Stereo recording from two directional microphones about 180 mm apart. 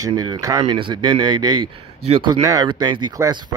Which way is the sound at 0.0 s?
20° right (ahead or behind).